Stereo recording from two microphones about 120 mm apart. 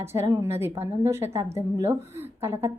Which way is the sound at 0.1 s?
25° right (ahead or behind).